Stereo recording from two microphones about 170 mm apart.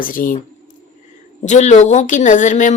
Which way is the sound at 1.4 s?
45° left (ahead or behind).